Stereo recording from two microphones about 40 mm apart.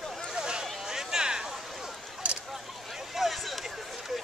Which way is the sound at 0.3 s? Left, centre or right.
Centre.